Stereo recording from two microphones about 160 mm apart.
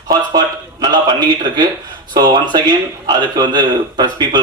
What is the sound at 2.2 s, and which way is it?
A man's voice, 25° right (ahead or behind).